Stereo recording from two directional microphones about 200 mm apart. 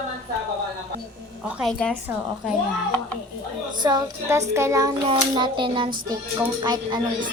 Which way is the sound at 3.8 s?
15° right (ahead or behind).